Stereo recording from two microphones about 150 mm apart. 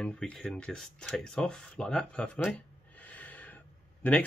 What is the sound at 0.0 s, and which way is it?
Speech, 5° left (ahead or behind).